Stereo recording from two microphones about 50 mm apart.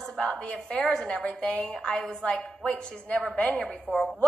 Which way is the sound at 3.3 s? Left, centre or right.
Left.